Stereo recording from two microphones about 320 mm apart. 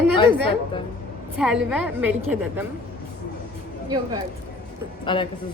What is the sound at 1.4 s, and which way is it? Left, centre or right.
Speech, centre.